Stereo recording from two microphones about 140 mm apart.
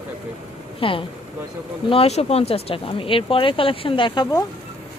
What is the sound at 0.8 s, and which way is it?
Speech, 40° left (ahead or behind).